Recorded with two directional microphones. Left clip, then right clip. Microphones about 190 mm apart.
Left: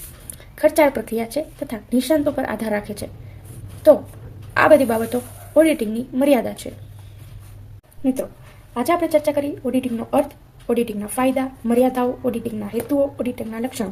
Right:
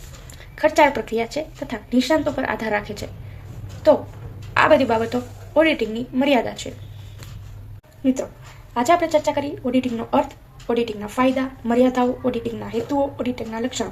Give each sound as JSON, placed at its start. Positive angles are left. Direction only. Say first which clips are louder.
{"t": 0.5, "sound": "speech", "louder": "even", "side_deg": 25}
{"t": 4.5, "sound": "speech", "louder": "left 2 dB", "side_deg": 30}
{"t": 8.0, "sound": "speech", "louder": "even", "side_deg": 20}